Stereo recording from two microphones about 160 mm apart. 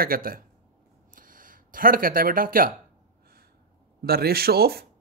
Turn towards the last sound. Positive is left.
turn(degrees=-75)  # may be behind; listen again after turning